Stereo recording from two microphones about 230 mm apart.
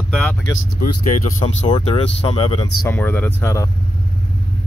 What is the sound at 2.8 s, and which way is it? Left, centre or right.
Speech, centre.